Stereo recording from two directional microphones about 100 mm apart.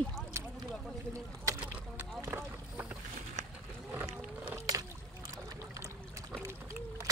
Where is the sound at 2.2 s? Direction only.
25° right (ahead or behind).